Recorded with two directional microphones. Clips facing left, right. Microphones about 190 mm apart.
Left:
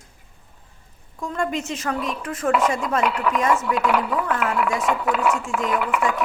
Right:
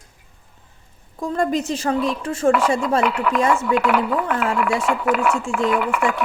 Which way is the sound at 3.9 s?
5° right (ahead or behind).